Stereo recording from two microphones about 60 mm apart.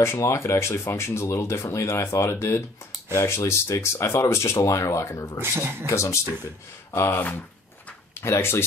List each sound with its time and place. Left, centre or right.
0.0 s speech: left
4.6 s speech: left
5.4 s speech: right
5.9 s speech: left
6.9 s speech: left
8.2 s speech: left